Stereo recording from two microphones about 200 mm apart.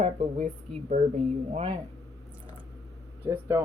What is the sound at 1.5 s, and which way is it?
Speech, 30° right (ahead or behind).